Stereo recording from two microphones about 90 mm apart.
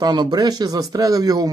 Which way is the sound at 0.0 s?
50° right (ahead or behind).